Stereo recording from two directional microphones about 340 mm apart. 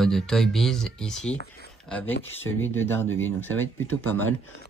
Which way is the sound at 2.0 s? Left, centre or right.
Left.